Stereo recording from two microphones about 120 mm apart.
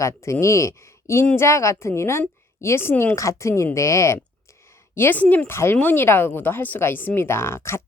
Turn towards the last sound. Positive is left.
turn(degrees=20)  # may be behind; listen again after turning